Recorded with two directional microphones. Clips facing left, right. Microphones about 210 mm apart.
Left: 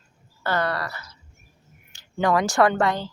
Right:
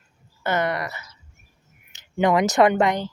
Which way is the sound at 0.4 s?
20° right (ahead or behind).